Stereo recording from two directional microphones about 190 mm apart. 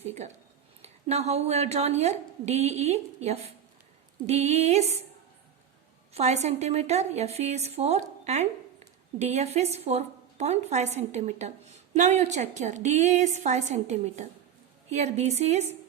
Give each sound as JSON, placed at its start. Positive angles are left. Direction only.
{"t": 0.0, "sound": "a woman's voice", "side_deg": -35}
{"t": 6.1, "sound": "a woman's voice", "side_deg": -35}